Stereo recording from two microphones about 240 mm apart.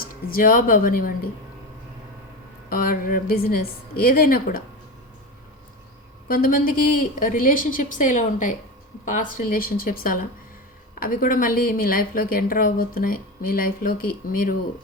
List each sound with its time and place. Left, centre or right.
0.0 s a woman's voice: left
2.6 s a woman's voice: left
6.2 s a woman's voice: left